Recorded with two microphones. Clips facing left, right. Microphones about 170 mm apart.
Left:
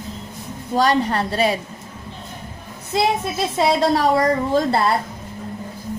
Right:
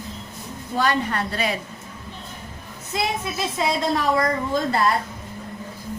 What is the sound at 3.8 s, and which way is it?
Speech, 35° left (ahead or behind).